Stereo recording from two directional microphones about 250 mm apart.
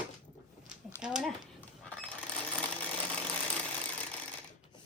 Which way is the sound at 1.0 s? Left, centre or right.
Centre.